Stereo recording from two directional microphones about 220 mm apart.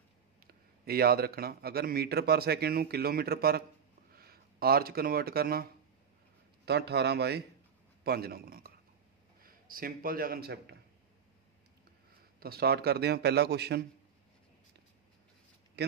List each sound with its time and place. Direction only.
0.5 s a man's voice: 45° right (ahead or behind)
12.4 s speech: 45° right (ahead or behind)